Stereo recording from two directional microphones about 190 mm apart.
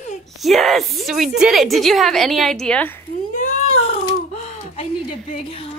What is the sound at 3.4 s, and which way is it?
Speech, 35° left (ahead or behind).